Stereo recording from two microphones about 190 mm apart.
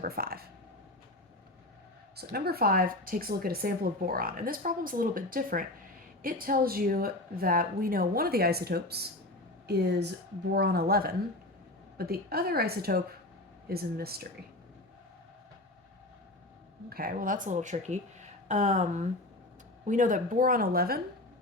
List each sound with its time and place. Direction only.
0.0 s speech: 50° right (ahead or behind)
2.1 s speech: 55° right (ahead or behind)
10.5 s speech: 60° right (ahead or behind)
16.9 s speech: 50° right (ahead or behind)